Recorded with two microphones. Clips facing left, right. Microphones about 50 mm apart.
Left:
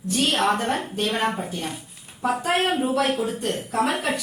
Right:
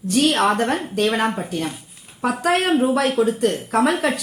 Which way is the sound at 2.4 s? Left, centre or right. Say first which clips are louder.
Right 6 dB; right.